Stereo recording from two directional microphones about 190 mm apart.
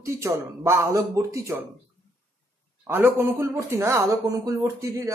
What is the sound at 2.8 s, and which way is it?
Speech, 15° right (ahead or behind).